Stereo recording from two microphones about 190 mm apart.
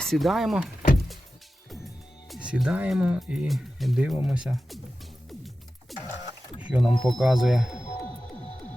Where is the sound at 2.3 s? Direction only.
5° right (ahead or behind).